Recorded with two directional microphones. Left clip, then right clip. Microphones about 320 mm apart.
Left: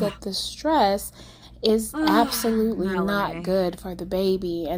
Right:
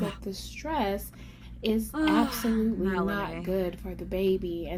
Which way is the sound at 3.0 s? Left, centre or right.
Left.